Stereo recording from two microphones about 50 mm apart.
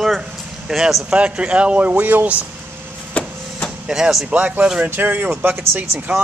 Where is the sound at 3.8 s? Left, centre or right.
Centre.